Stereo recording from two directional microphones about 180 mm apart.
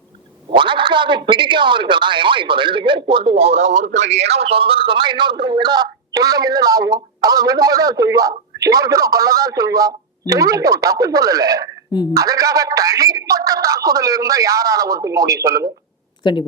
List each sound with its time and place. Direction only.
0.5 s speech: 25° right (ahead or behind)